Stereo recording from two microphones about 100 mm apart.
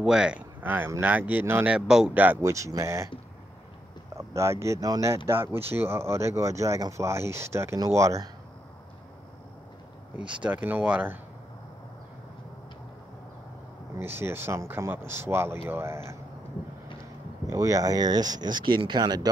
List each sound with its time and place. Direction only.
0.0 s speech: 5° right (ahead or behind)
1.7 s speech: 5° right (ahead or behind)
2.1 s speech: 20° right (ahead or behind)
2.4 s speech: 30° right (ahead or behind)
4.1 s speech: 30° right (ahead or behind)
10.4 s speech: 15° right (ahead or behind)
13.9 s speech: 25° right (ahead or behind)
17.5 s speech: 35° right (ahead or behind)